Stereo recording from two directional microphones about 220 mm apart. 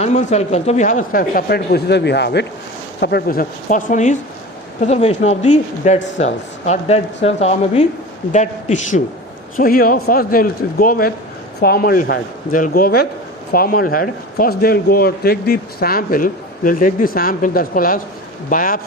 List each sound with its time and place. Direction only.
0.0 s a man's voice: 30° left (ahead or behind)